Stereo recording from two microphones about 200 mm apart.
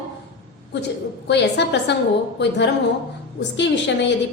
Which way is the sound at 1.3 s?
60° left (ahead or behind).